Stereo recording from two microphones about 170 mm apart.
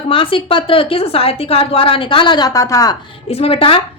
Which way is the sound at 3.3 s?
35° left (ahead or behind).